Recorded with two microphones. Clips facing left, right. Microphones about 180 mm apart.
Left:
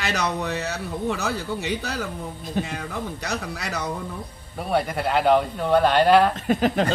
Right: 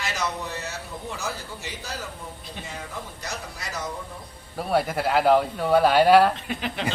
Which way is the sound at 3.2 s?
65° left (ahead or behind).